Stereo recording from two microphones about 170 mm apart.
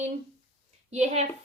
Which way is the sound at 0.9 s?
40° right (ahead or behind).